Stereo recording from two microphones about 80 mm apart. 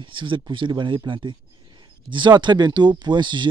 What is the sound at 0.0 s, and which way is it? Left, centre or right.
A man's voice, right.